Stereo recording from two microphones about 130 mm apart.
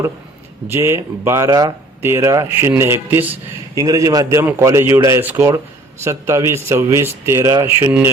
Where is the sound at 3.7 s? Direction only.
25° right (ahead or behind).